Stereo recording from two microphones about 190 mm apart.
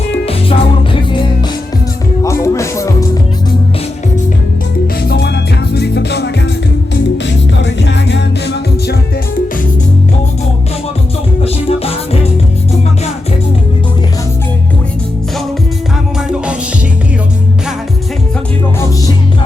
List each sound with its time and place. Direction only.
0.3 s music: 30° left (ahead or behind)
2.2 s music: 15° left (ahead or behind)
5.0 s music: 55° left (ahead or behind)
11.4 s music: 30° left (ahead or behind)